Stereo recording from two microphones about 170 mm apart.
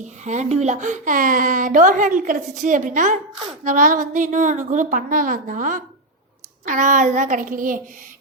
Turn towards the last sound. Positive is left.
turn(degrees=-55)  # may be behind; listen again after turning